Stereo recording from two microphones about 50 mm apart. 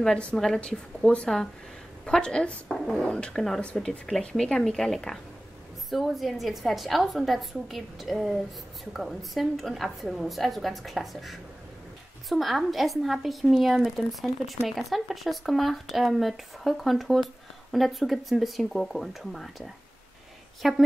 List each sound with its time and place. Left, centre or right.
0.6 s speech: left
2.7 s speech: centre
3.1 s speech: centre
3.3 s speech: centre